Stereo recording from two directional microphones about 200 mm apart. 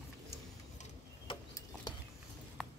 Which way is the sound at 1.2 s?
20° left (ahead or behind).